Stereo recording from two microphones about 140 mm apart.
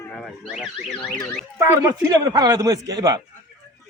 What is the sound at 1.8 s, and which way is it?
A man's voice, 25° right (ahead or behind).